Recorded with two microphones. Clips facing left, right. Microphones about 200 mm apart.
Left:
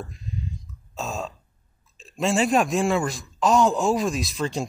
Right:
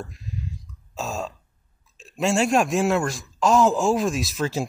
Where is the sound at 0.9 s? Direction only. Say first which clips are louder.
Right 1 dB; centre (ahead or behind).